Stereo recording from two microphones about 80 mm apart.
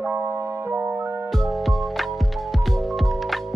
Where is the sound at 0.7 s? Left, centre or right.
Right.